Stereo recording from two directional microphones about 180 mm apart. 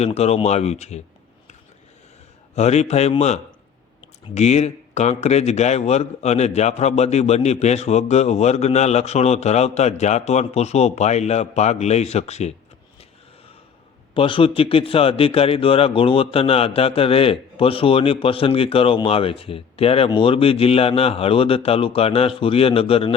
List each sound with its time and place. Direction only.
0.0 s a man's voice: 35° left (ahead or behind)
2.6 s a man's voice: 35° left (ahead or behind)
14.1 s a man's voice: 30° left (ahead or behind)